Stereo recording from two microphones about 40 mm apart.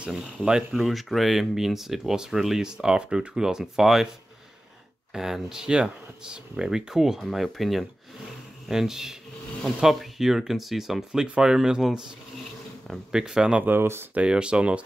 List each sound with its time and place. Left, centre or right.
0.1 s speech: centre
0.7 s speech: centre
5.1 s speech: centre
5.7 s speech: right
7.5 s speech: centre
13.1 s speech: centre
13.7 s speech: right
14.2 s speech: right